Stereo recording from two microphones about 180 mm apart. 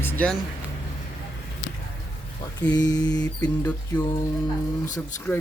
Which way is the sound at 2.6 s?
20° left (ahead or behind).